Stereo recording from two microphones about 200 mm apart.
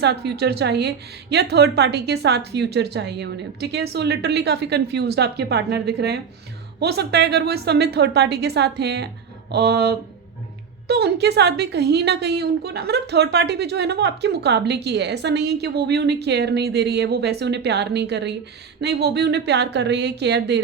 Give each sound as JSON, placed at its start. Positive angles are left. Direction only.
{"t": 0.0, "sound": "a woman's voice", "side_deg": -55}